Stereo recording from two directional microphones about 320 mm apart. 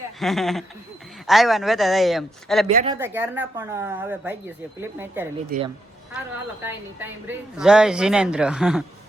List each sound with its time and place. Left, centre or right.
0.2 s a woman's voice: centre
2.6 s speech: centre
5.5 s speech: right
6.7 s a woman's voice: centre